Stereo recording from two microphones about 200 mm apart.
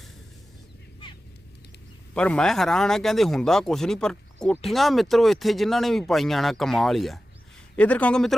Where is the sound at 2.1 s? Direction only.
5° left (ahead or behind).